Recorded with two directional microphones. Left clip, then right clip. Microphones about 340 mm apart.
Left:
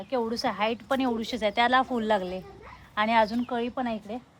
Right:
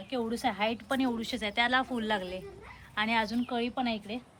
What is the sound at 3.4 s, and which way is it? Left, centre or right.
Speech, centre.